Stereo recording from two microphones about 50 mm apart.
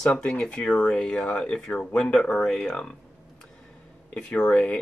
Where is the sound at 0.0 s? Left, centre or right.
Centre.